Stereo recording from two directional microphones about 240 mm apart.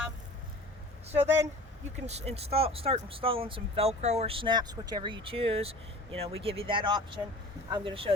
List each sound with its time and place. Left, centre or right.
1.0 s speech: right